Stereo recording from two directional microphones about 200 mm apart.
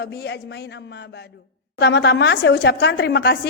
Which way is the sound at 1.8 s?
55° left (ahead or behind).